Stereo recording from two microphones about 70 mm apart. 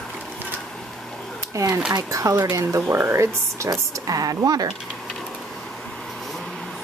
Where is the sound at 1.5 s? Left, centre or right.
Right.